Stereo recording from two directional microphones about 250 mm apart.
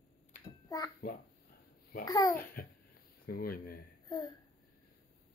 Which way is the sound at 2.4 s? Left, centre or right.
Left.